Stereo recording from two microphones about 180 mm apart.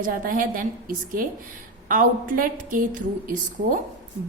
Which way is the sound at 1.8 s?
50° right (ahead or behind).